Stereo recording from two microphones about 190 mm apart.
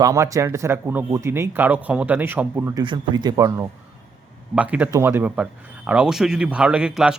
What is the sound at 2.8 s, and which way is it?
Speech, 25° right (ahead or behind).